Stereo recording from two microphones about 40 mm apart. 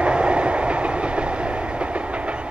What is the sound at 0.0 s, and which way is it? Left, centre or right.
Train, right.